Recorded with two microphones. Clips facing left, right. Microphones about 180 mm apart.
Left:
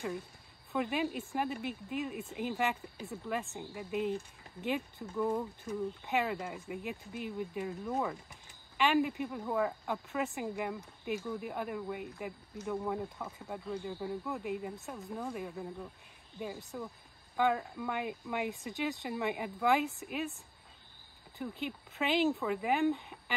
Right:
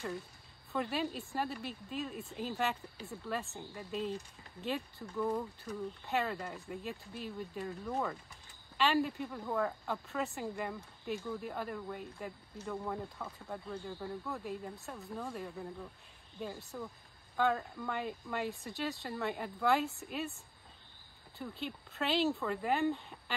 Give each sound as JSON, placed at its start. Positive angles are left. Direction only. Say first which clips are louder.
{"t": 0.8, "sound": "speech", "louder": "left 3 dB", "side_deg": 15}
{"t": 2.7, "sound": "speech", "louder": "left 2 dB", "side_deg": 0}
{"t": 3.9, "sound": "speech", "louder": "left 4 dB", "side_deg": 15}
{"t": 5.1, "sound": "speech", "louder": "left 2 dB", "side_deg": 5}
{"t": 5.7, "sound": "speech", "louder": "left 4 dB", "side_deg": 15}
{"t": 6.4, "sound": "speech", "louder": "left 2 dB", "side_deg": 5}
{"t": 10.0, "sound": "speech", "louder": "left 3 dB", "side_deg": 15}
{"t": 21.4, "sound": "speech", "louder": "left 3 dB", "side_deg": 15}